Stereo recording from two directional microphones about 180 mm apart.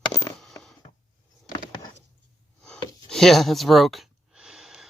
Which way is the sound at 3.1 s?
Centre (ahead or behind).